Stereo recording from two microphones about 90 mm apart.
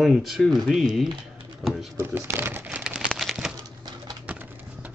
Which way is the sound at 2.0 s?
25° right (ahead or behind).